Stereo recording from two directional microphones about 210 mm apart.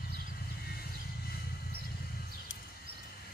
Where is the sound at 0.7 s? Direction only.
50° left (ahead or behind).